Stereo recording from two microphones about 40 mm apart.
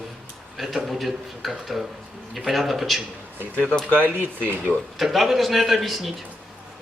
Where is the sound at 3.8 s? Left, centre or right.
Left.